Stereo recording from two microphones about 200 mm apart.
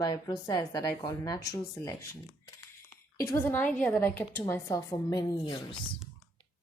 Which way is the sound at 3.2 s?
15° left (ahead or behind).